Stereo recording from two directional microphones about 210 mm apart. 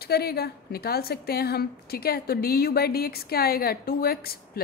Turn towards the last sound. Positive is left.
turn(degrees=45)  # may be behind; listen again after turning